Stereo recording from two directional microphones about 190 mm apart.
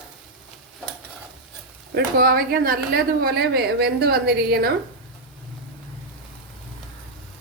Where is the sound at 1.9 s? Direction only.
50° right (ahead or behind).